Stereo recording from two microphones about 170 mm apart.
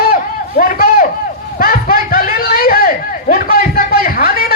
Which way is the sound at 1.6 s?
60° left (ahead or behind).